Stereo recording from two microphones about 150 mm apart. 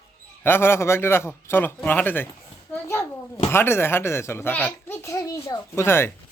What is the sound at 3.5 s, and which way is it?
A child's voice, 15° left (ahead or behind).